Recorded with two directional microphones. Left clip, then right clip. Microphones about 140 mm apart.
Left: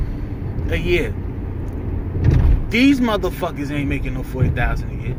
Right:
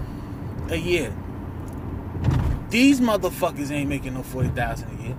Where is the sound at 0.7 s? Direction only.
40° right (ahead or behind).